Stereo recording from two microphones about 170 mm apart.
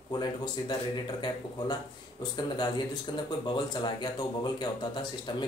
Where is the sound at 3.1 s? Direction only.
25° left (ahead or behind).